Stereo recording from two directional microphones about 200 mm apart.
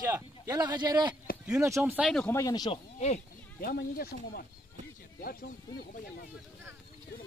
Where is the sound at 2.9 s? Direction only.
35° left (ahead or behind).